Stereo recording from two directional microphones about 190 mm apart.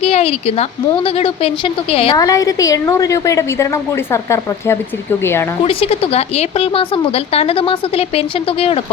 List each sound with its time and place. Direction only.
0.0 s a woman's voice: 30° left (ahead or behind)
2.1 s a woman's voice: 20° left (ahead or behind)
5.6 s a woman's voice: 30° left (ahead or behind)